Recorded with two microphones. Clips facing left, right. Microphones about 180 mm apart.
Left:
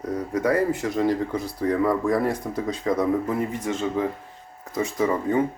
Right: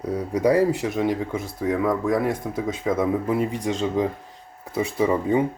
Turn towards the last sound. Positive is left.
turn(degrees=-15)  # may be behind; listen again after turning